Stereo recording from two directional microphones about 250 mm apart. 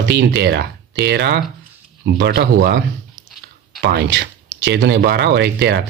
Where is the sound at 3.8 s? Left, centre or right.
Right.